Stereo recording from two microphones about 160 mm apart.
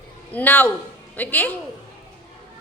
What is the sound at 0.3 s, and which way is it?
A man's voice, 10° left (ahead or behind).